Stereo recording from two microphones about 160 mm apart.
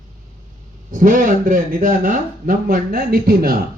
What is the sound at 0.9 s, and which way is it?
Speech, 55° right (ahead or behind).